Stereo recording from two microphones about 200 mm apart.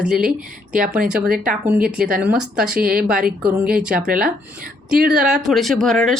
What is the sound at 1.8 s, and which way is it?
Speech, 45° right (ahead or behind).